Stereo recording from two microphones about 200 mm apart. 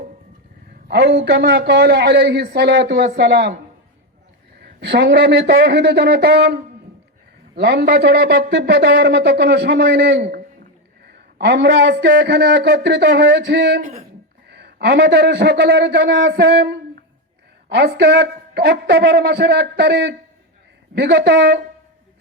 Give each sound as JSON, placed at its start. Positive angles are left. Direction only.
{"t": 0.9, "sound": "a man's voice", "side_deg": -55}
{"t": 4.6, "sound": "a man's voice", "side_deg": -55}
{"t": 7.6, "sound": "a man's voice", "side_deg": -55}